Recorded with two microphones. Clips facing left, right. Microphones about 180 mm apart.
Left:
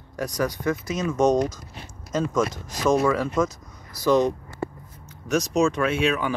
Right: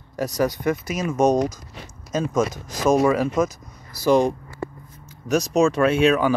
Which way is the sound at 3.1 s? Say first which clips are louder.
Right 3 dB; 20° right (ahead or behind).